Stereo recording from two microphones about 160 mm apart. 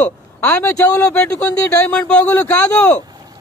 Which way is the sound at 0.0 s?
15° left (ahead or behind).